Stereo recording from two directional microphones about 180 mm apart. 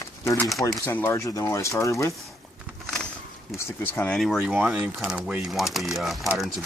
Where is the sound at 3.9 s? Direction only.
5° left (ahead or behind).